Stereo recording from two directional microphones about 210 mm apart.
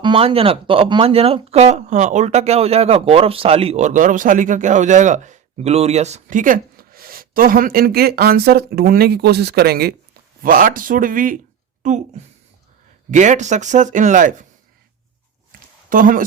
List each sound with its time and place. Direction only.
0.0 s speech: 25° right (ahead or behind)
15.9 s speech: 40° right (ahead or behind)